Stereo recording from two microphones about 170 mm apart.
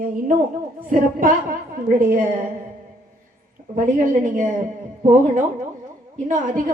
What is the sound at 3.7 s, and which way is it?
A woman's voice, 50° right (ahead or behind).